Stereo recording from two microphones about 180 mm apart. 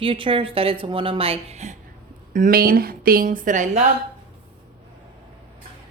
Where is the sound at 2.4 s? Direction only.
50° right (ahead or behind).